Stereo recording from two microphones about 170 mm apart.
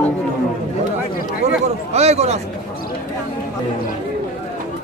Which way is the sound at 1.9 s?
40° right (ahead or behind).